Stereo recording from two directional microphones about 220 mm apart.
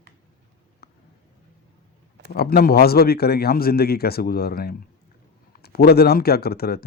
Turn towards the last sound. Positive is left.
turn(degrees=45)  # may be behind; listen again after turning